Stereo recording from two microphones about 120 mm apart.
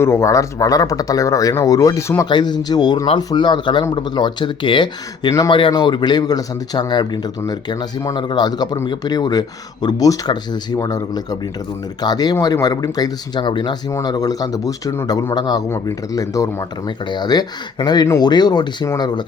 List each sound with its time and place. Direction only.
0.0 s speech: 20° left (ahead or behind)
2.3 s speech: 35° left (ahead or behind)